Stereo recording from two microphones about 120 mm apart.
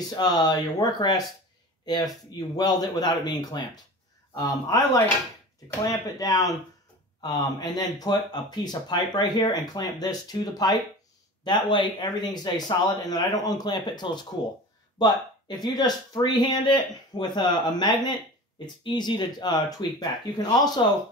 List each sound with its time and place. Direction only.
0.1 s speech: 35° left (ahead or behind)
2.5 s speech: 35° left (ahead or behind)